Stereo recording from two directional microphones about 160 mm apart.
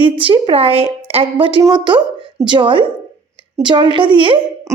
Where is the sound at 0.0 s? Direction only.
35° right (ahead or behind).